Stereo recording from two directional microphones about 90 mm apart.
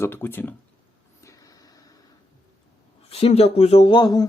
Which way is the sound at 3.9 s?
45° left (ahead or behind).